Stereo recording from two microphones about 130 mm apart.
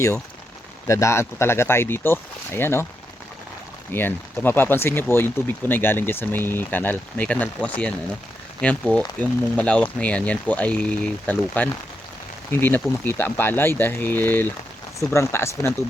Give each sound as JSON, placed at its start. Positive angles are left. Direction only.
{"t": 0.9, "sound": "speech", "side_deg": 20}
{"t": 3.9, "sound": "speech", "side_deg": 15}